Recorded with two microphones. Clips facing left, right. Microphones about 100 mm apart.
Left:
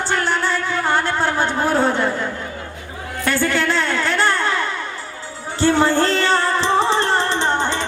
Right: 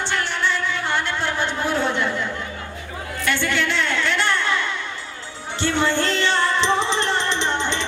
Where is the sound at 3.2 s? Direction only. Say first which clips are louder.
Left 4 dB; 40° left (ahead or behind).